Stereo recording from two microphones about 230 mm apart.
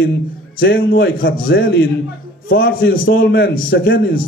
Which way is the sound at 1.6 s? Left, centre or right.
Left.